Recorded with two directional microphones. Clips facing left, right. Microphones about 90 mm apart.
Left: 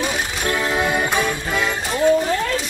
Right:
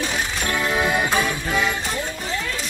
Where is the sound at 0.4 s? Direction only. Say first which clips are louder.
Left 2 dB; 5° left (ahead or behind).